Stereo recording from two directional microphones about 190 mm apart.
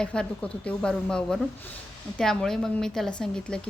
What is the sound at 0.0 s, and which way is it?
A woman's voice, 5° left (ahead or behind).